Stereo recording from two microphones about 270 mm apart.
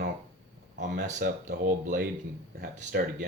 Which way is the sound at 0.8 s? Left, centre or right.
Right.